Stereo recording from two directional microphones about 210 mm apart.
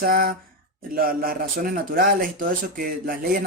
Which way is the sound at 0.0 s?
45° right (ahead or behind).